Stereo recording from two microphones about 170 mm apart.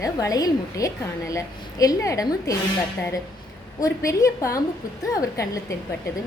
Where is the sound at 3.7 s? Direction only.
20° left (ahead or behind).